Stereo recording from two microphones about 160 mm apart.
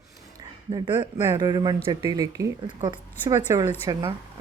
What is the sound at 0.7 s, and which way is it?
Speech, 30° right (ahead or behind).